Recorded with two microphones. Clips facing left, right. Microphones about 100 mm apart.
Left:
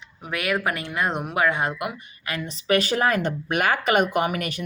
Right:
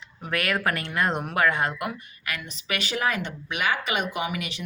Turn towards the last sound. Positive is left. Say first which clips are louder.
# left 6 dB
turn(degrees=50)  # may be behind; listen again after turning